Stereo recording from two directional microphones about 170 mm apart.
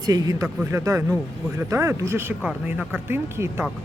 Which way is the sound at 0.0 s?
20° right (ahead or behind).